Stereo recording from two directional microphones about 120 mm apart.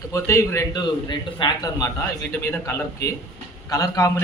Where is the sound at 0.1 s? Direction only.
25° left (ahead or behind).